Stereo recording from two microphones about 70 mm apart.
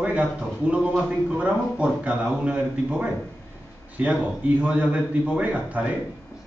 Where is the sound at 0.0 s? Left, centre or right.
Centre.